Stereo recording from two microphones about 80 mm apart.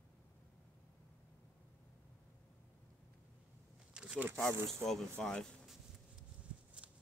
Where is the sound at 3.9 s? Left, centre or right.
Centre.